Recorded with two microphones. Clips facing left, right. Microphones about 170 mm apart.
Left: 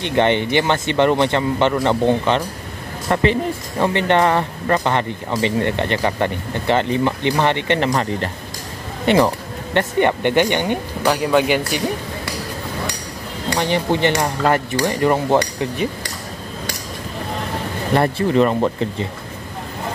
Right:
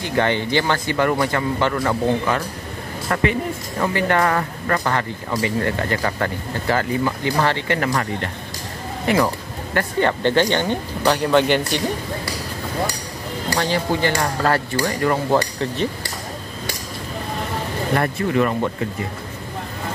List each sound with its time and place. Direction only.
0.0 s speech: 20° left (ahead or behind)
13.5 s speech: 20° left (ahead or behind)
17.9 s speech: 30° left (ahead or behind)